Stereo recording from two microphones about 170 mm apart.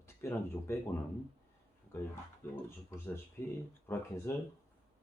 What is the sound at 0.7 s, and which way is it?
Speech, 15° left (ahead or behind).